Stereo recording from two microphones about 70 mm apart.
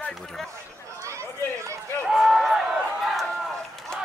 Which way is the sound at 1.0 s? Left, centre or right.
Right.